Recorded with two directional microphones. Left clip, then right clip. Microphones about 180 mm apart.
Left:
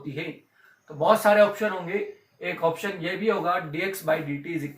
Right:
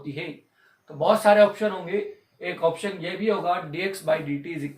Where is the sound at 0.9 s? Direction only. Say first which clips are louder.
Right 1 dB; 20° right (ahead or behind).